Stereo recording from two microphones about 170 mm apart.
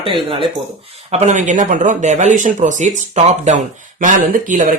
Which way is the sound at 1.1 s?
40° right (ahead or behind).